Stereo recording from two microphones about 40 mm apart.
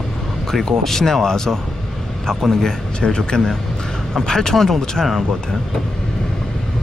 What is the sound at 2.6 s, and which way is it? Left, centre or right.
Speech, centre.